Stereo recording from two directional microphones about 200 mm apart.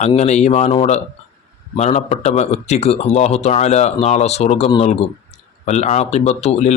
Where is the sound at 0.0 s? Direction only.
35° left (ahead or behind).